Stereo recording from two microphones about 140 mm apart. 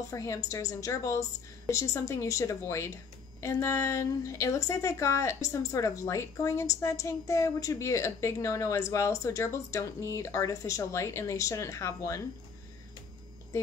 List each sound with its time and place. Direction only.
0.1 s a woman's voice: 20° left (ahead or behind)